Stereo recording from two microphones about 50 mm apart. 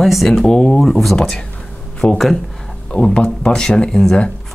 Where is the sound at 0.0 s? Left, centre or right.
Centre.